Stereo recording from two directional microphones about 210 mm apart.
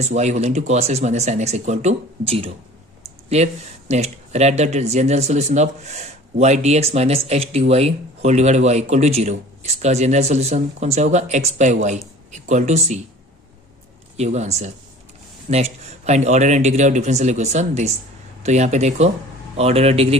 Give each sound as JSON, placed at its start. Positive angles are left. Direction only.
{"t": 0.0, "sound": "speech", "side_deg": -35}
{"t": 14.1, "sound": "speech", "side_deg": -30}